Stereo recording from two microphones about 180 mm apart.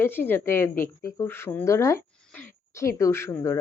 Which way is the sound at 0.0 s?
10° left (ahead or behind).